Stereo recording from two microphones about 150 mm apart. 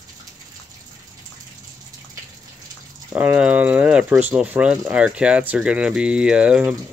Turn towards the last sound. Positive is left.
turn(degrees=-5)  # may be behind; listen again after turning